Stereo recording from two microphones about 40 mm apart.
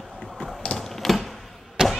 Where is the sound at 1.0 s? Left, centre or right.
Centre.